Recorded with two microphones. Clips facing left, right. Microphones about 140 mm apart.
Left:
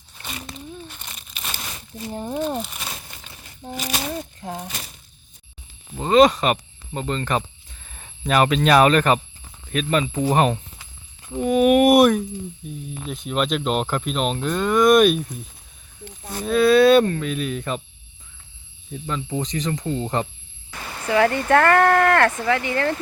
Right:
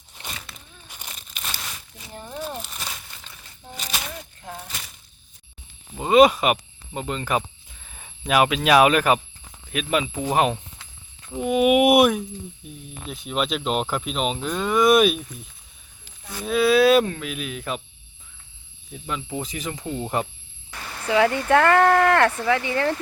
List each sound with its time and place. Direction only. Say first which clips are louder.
0.9 s crumpling: left 2 dB; 10° right (ahead or behind)
1.5 s crumpling: left 1 dB; 15° left (ahead or behind)
2.0 s speech: left 12 dB; 30° left (ahead or behind)
3.9 s speech: left 4 dB; 25° left (ahead or behind)
6.0 s speech: even; 10° right (ahead or behind)
10.3 s a sound: right 1 dB; centre (ahead or behind)
11.3 s speech: left 2 dB; 5° right (ahead or behind)
16.2 s speech: left 4 dB; 40° left (ahead or behind)
16.5 s speech: left 3 dB; centre (ahead or behind)
19.0 s speech: left 3 dB; 5° right (ahead or behind)